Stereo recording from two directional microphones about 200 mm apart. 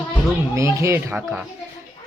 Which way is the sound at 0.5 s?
15° right (ahead or behind).